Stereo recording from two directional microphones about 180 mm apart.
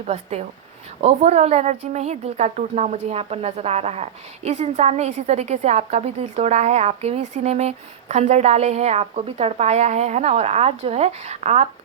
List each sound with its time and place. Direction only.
0.1 s a woman's voice: 35° right (ahead or behind)